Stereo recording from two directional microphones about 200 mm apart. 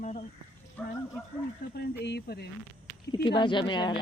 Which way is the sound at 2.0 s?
55° left (ahead or behind).